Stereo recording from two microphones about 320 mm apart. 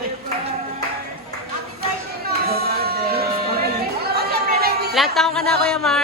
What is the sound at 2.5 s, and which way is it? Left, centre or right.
Music, right.